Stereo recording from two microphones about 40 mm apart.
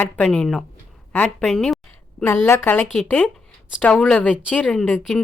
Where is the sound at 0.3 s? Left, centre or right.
Centre.